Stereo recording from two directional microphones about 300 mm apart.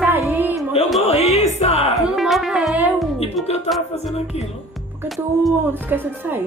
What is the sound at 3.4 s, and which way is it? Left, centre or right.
Speech, left.